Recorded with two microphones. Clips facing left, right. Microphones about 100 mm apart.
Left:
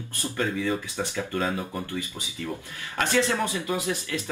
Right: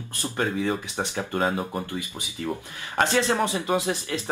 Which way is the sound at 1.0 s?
40° right (ahead or behind).